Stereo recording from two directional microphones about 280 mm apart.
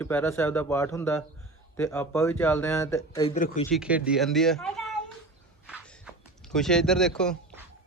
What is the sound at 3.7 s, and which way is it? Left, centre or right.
Speech, centre.